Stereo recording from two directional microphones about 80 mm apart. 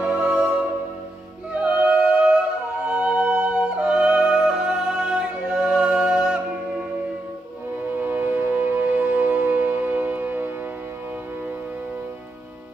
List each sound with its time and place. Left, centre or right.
0.0 s music: centre
1.5 s music: centre
8.0 s music: right